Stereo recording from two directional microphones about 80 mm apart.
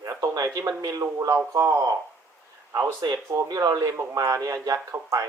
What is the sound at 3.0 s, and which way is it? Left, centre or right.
Speech, right.